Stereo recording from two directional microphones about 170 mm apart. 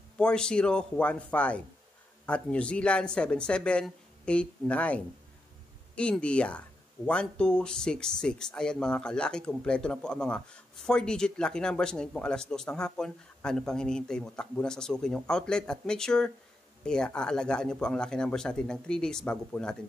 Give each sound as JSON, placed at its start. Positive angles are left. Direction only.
{"t": 0.2, "sound": "speech", "side_deg": 5}